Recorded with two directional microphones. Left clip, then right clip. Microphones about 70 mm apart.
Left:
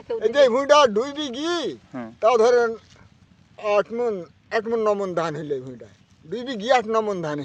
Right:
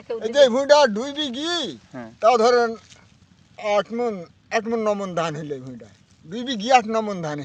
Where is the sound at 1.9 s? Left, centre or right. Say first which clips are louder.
Left 2 dB; left.